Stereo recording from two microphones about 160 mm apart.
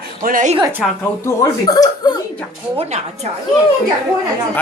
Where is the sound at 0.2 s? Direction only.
55° right (ahead or behind).